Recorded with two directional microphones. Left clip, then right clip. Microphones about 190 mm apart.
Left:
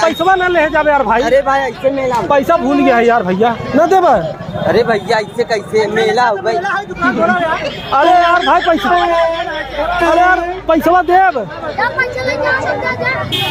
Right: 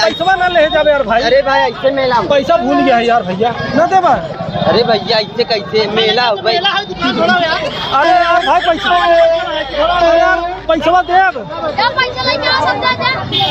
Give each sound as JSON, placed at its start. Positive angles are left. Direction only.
{"t": 0.2, "sound": "a man's voice", "side_deg": 40}
{"t": 1.2, "sound": "speech", "side_deg": 20}
{"t": 2.3, "sound": "a man's voice", "side_deg": 45}
{"t": 4.7, "sound": "speech", "side_deg": 30}
{"t": 6.7, "sound": "speech", "side_deg": 5}
{"t": 10.2, "sound": "a man's voice", "side_deg": 55}
{"t": 12.2, "sound": "speech", "side_deg": -15}